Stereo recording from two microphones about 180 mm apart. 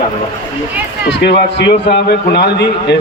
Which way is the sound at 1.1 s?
70° left (ahead or behind).